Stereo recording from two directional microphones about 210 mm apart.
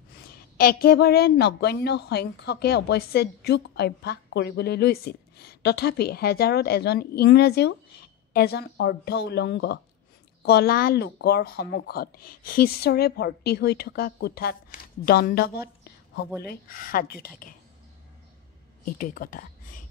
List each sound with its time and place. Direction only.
0.6 s a woman's voice: 45° left (ahead or behind)
18.9 s speech: 40° left (ahead or behind)